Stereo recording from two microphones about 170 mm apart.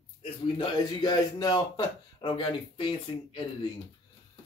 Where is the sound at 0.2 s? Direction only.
30° left (ahead or behind).